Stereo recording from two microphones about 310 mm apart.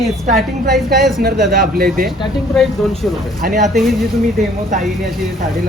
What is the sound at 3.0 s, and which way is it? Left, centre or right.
Speech, centre.